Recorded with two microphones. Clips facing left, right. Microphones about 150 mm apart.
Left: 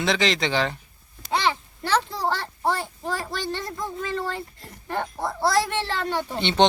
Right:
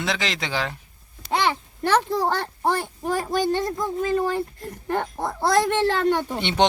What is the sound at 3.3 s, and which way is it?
Speech, 45° right (ahead or behind).